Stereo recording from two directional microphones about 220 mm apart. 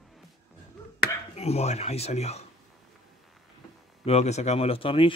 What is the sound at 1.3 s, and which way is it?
Speech, 30° left (ahead or behind).